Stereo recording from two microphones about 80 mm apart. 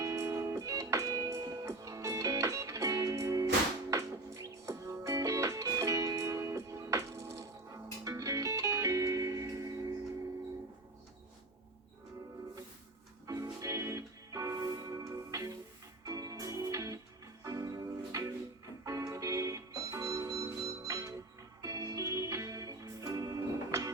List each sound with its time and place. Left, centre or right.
0.0 s music: right
13.2 s music: right